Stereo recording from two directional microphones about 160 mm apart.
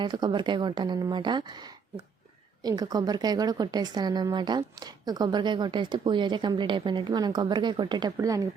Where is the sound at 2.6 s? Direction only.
25° right (ahead or behind).